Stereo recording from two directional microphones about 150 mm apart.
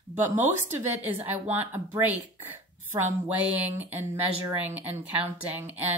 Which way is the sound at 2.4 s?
15° right (ahead or behind).